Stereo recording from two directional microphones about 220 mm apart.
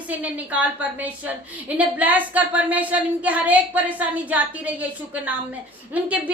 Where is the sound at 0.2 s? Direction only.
5° right (ahead or behind).